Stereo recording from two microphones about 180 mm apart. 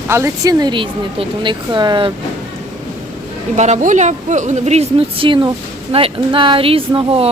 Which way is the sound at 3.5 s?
40° right (ahead or behind).